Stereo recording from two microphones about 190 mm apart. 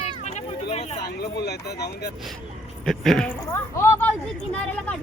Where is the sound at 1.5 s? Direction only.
60° left (ahead or behind).